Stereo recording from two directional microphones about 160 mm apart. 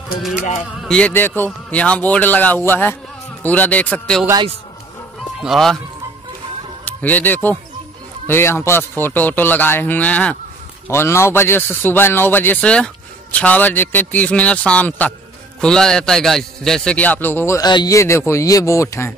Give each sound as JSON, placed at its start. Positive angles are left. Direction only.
{"t": 0.2, "sound": "a man's voice", "side_deg": -5}
{"t": 5.4, "sound": "a man's voice", "side_deg": 0}
{"t": 6.8, "sound": "a man's voice", "side_deg": 10}